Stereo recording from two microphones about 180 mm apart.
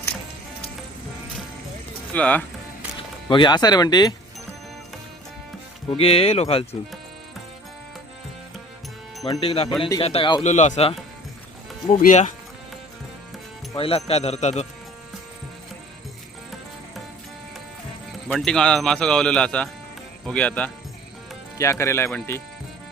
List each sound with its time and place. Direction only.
2.1 s speech: 5° left (ahead or behind)
3.2 s speech: 25° left (ahead or behind)
6.0 s speech: 30° left (ahead or behind)
9.2 s speech: 25° left (ahead or behind)
10.4 s speech: 40° left (ahead or behind)
13.7 s speech: 30° left (ahead or behind)
18.3 s speech: 5° left (ahead or behind)